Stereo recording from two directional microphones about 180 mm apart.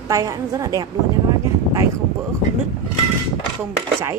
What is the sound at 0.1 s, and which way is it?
Speech, 20° right (ahead or behind).